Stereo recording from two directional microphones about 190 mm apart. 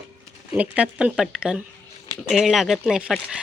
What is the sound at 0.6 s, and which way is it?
Speech, 5° right (ahead or behind).